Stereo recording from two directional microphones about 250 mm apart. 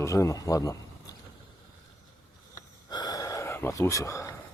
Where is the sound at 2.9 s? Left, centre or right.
Centre.